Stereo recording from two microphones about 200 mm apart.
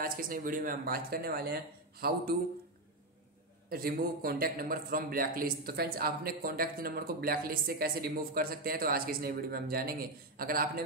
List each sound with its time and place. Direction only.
0.0 s a man's voice: 45° right (ahead or behind)
3.6 s a man's voice: 50° right (ahead or behind)